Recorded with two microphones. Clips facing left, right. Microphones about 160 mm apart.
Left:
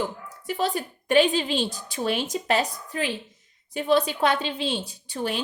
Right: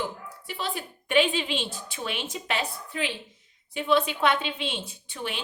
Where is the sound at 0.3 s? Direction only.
45° left (ahead or behind).